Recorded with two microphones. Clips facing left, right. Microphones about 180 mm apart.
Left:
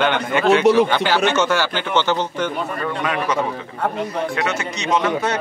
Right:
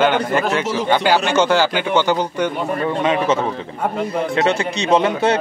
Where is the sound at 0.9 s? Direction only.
10° right (ahead or behind).